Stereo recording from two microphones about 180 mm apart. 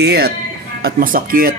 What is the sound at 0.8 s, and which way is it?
Speech, 55° right (ahead or behind).